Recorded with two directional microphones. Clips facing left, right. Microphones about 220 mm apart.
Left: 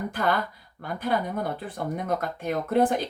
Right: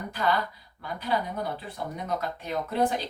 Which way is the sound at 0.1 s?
50° left (ahead or behind).